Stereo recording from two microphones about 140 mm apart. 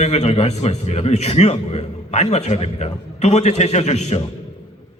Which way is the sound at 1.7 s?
50° left (ahead or behind).